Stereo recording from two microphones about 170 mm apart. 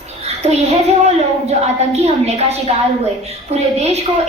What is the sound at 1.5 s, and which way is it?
A woman's voice, 40° right (ahead or behind).